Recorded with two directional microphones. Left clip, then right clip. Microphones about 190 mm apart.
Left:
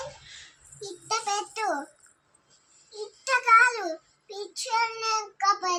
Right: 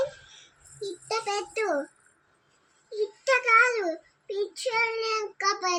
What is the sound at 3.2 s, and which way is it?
Child singing, 25° left (ahead or behind).